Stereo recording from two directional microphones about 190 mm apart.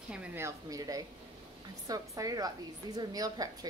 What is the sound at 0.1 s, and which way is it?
A woman's voice, 10° right (ahead or behind).